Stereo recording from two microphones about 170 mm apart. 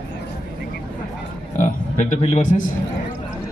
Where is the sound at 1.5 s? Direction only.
45° left (ahead or behind).